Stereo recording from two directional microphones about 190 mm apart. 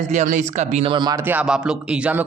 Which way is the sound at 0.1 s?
40° right (ahead or behind).